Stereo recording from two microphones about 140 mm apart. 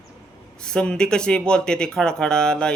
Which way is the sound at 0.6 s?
5° left (ahead or behind).